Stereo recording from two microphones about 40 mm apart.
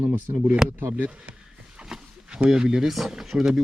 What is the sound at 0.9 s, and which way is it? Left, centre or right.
Speech, right.